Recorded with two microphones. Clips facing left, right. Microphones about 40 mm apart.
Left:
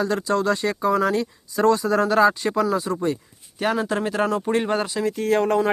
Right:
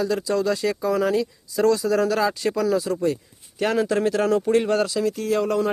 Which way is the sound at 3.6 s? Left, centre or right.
Centre.